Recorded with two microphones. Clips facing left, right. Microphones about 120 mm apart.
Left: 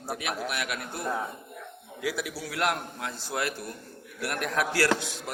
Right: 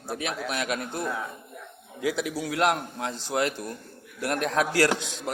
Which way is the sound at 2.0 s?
20° right (ahead or behind).